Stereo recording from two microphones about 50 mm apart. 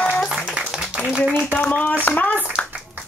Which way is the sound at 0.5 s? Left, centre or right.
Centre.